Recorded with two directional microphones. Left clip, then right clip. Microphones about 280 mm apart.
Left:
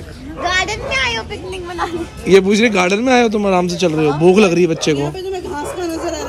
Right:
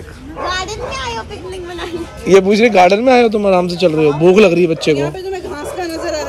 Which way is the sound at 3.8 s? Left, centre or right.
Centre.